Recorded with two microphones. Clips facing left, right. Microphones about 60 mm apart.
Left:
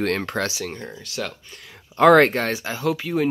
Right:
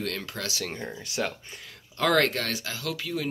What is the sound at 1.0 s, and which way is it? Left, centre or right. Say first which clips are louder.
Speech: right 1 dB; centre.